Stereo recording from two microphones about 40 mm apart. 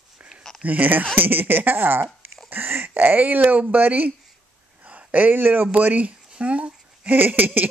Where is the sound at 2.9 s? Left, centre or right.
Right.